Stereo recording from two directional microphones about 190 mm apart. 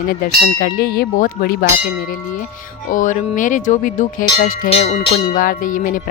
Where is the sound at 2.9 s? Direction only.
45° left (ahead or behind).